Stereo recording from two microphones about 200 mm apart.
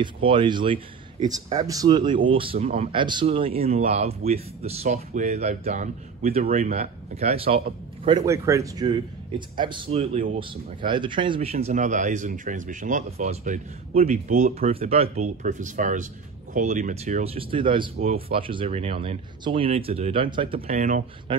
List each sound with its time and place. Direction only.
0.0 s a man's voice: 25° right (ahead or behind)
8.3 s speech: 15° right (ahead or behind); by 21.0 s 40° right (ahead or behind)
21.3 s speech: 25° right (ahead or behind)